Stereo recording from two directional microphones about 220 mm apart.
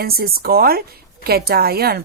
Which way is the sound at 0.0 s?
45° right (ahead or behind).